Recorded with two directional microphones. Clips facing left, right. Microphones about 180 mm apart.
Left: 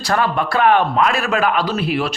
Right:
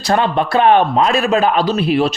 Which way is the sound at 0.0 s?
25° right (ahead or behind).